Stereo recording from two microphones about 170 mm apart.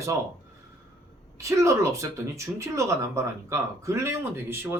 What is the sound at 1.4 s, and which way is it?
Speech, 20° right (ahead or behind).